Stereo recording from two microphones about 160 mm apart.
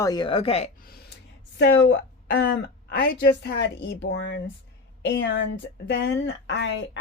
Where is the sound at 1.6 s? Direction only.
90° left.